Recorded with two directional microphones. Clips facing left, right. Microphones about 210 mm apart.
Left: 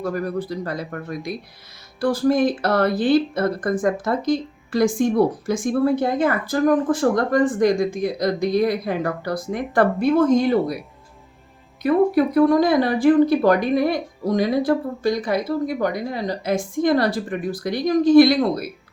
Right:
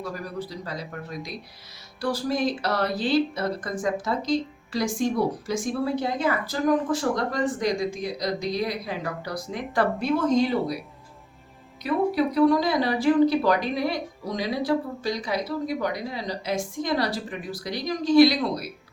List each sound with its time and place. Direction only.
0.0 s speech: 50° left (ahead or behind)
11.8 s speech: 50° left (ahead or behind)